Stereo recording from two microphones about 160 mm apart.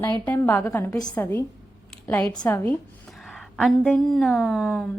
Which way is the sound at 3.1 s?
Centre (ahead or behind).